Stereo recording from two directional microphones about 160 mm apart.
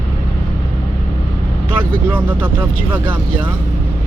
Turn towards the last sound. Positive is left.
turn(degrees=-10)  # may be behind; listen again after turning